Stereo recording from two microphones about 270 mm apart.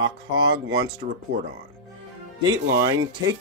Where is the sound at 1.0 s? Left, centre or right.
Right.